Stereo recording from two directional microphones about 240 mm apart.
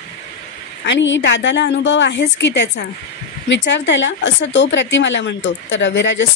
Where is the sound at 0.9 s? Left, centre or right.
Left.